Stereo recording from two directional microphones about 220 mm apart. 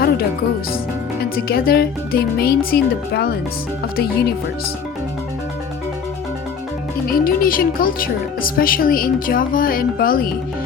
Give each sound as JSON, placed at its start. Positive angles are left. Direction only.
{"t": 1.2, "sound": "speech", "side_deg": 45}
{"t": 7.1, "sound": "speech", "side_deg": 40}